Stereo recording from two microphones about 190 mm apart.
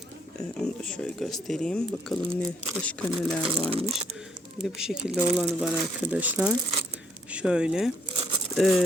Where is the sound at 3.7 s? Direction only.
30° right (ahead or behind).